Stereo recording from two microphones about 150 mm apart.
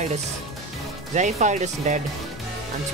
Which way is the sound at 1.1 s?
55° right (ahead or behind).